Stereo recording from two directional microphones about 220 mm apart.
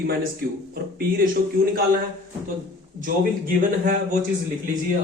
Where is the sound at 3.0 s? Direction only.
40° right (ahead or behind).